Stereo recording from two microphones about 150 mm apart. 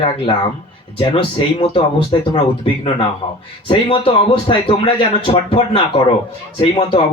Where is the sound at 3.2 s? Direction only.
45° left (ahead or behind).